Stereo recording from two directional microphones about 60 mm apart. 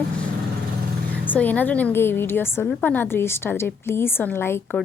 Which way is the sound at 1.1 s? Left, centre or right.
Left.